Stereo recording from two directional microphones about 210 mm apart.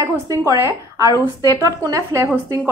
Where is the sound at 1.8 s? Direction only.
15° right (ahead or behind).